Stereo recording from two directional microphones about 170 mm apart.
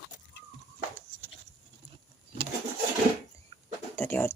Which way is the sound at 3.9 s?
15° left (ahead or behind).